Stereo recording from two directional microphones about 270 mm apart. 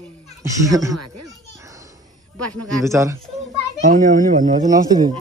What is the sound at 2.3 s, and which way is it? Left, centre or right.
Speech, right.